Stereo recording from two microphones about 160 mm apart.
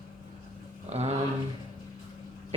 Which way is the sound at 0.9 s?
40° right (ahead or behind).